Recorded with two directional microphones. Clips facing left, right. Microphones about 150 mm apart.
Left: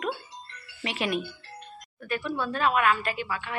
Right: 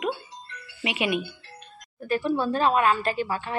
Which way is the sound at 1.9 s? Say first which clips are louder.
Right 6 dB; 35° right (ahead or behind).